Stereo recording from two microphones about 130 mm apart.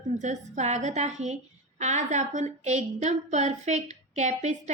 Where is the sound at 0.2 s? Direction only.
65° right (ahead or behind).